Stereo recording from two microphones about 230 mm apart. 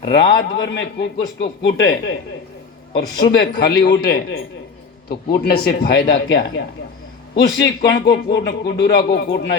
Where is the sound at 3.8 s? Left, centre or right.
Left.